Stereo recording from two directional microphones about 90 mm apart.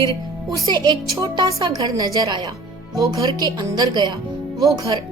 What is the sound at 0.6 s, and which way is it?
A woman's voice, 55° right (ahead or behind).